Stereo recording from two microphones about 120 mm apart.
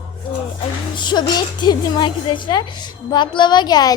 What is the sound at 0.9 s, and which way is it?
A woman's voice, 40° left (ahead or behind).